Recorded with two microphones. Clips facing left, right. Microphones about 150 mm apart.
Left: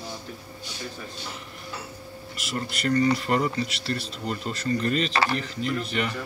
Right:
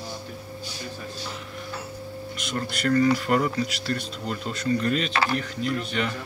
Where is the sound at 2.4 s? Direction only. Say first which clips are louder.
Right 1 dB; 5° left (ahead or behind).